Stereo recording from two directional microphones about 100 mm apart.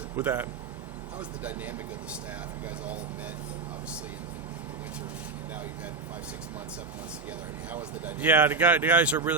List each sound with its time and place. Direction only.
0.2 s speech: 20° right (ahead or behind)
7.7 s speech: 15° right (ahead or behind)